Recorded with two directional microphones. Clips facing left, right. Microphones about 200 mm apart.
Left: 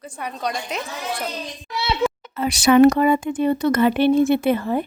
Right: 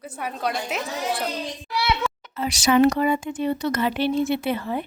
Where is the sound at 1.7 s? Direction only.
25° left (ahead or behind).